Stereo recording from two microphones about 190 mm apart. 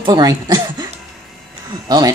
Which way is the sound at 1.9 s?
20° right (ahead or behind).